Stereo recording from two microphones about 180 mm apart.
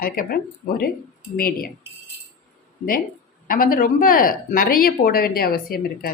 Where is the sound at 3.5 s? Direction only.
50° left (ahead or behind).